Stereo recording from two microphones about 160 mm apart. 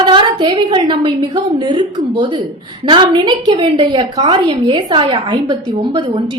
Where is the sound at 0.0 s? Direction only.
30° right (ahead or behind).